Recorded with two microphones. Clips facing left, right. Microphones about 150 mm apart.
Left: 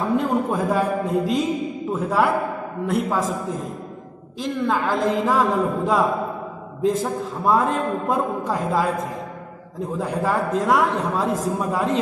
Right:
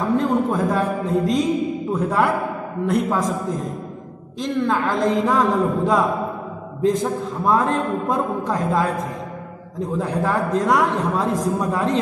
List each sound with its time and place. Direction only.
0.2 s a woman's voice: 10° left (ahead or behind)
4.4 s a woman's voice: 5° left (ahead or behind)